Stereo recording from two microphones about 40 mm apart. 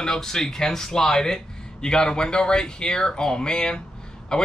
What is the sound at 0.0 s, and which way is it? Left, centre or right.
Speech, centre.